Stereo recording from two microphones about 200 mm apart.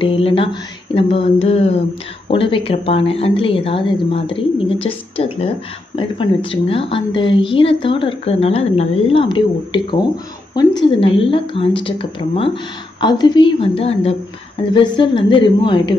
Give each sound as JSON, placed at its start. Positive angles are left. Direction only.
{"t": 0.0, "sound": "a woman's voice", "side_deg": 25}